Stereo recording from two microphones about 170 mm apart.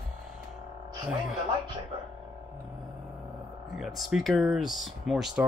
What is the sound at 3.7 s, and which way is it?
Speech, centre (ahead or behind).